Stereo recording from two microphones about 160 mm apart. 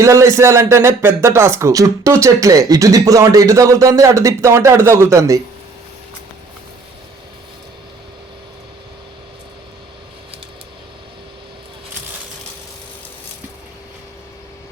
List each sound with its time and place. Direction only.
0.0 s speech: 20° right (ahead or behind)